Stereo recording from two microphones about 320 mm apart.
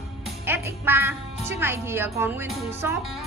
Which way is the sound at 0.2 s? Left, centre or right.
Centre.